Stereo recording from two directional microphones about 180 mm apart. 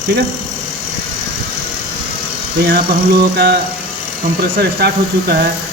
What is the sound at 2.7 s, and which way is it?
Speech, 60° right (ahead or behind).